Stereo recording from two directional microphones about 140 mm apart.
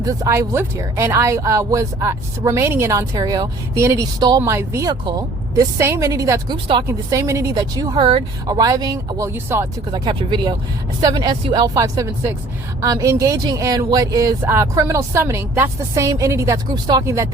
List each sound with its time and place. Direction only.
0.0 s speech: 20° right (ahead or behind)
6.5 s speech: 35° right (ahead or behind)
6.8 s speech: 20° right (ahead or behind)
9.9 s speech: 30° right (ahead or behind)